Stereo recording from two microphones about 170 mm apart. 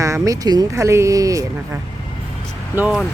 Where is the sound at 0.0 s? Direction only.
20° right (ahead or behind).